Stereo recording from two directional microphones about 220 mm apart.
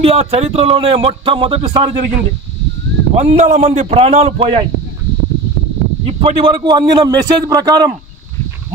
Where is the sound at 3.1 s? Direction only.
30° right (ahead or behind).